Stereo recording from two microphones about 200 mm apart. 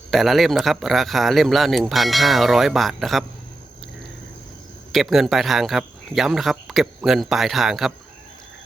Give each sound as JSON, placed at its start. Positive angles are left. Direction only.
{"t": 0.1, "sound": "speech", "side_deg": 0}
{"t": 4.9, "sound": "speech", "side_deg": 0}